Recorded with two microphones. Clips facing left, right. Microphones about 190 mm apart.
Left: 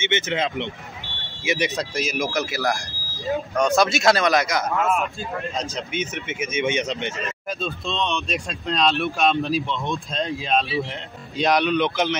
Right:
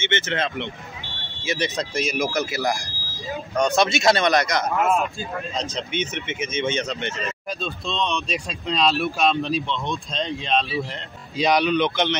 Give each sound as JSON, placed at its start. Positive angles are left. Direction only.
{"t": 0.0, "sound": "speech", "side_deg": 15}
{"t": 1.8, "sound": "speech", "side_deg": 0}
{"t": 7.6, "sound": "speech", "side_deg": 0}